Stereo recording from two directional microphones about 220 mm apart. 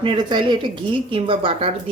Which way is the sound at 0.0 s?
20° right (ahead or behind).